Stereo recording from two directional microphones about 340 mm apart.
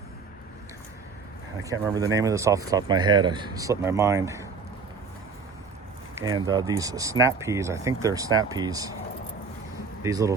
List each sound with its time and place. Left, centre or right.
1.9 s speech: centre
6.1 s speech: centre
10.0 s speech: centre